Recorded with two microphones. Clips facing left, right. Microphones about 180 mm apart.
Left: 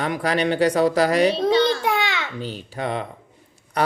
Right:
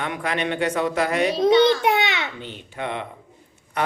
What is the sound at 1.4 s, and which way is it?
Babbling, 20° right (ahead or behind).